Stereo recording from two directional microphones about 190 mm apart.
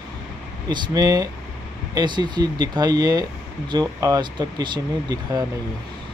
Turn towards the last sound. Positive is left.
turn(degrees=-20)  # may be behind; listen again after turning